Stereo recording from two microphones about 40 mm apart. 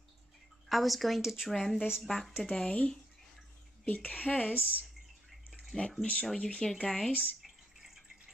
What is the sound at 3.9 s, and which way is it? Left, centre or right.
Speech, left.